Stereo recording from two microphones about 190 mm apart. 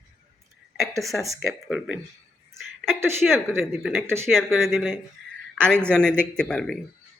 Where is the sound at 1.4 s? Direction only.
Centre (ahead or behind).